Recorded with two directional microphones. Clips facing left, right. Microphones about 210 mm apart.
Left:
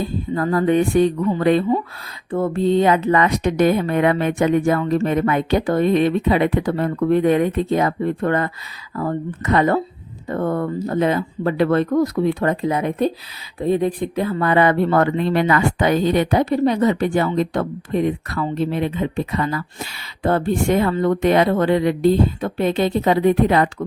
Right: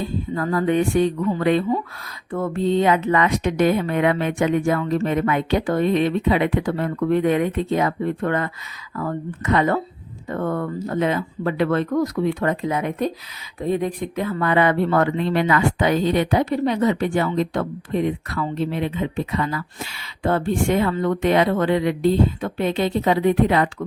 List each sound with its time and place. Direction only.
0.3 s speech: 35° left (ahead or behind)